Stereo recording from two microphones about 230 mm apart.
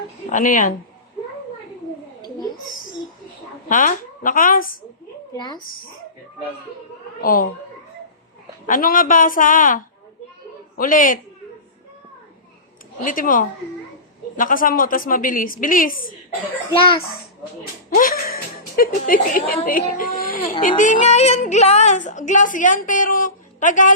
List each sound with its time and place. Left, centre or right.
0.3 s a woman's voice: left
3.7 s a woman's voice: left
5.4 s speech: centre
7.2 s speech: left
8.6 s a woman's voice: left
13.1 s a woman's voice: left
16.7 s speech: left
17.9 s a woman's voice: left